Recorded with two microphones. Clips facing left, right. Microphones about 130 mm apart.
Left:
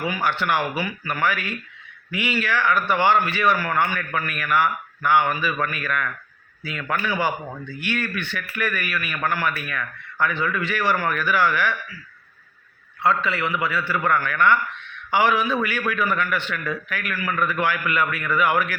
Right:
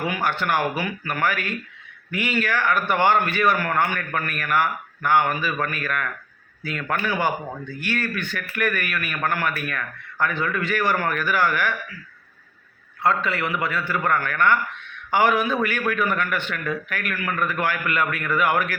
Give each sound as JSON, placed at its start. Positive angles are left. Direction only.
{"t": 0.0, "sound": "a man's voice", "side_deg": -50}
{"t": 13.0, "sound": "a man's voice", "side_deg": -45}